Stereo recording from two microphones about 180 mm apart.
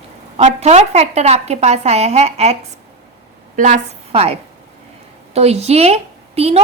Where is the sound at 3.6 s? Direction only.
40° right (ahead or behind).